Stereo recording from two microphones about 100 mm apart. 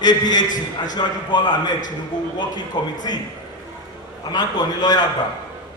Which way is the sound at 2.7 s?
45° left (ahead or behind).